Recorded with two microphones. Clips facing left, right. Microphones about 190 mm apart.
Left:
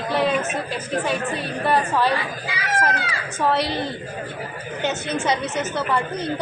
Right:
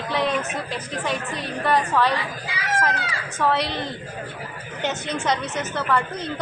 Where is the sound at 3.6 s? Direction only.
5° left (ahead or behind).